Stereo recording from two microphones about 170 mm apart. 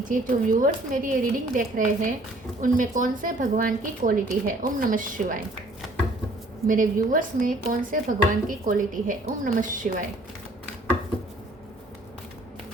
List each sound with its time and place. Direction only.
0.1 s speech: 50° right (ahead or behind)
6.7 s speech: 55° right (ahead or behind)